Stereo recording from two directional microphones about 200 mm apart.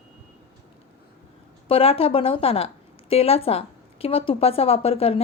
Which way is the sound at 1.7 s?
30° left (ahead or behind).